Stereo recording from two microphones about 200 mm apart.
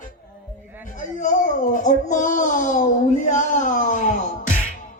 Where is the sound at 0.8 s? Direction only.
40° left (ahead or behind).